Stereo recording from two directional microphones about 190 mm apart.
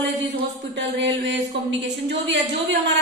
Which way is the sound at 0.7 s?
70° right (ahead or behind).